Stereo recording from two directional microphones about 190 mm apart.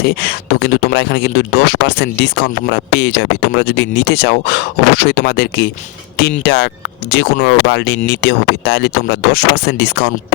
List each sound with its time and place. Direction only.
0.0 s a man's voice: 55° left (ahead or behind)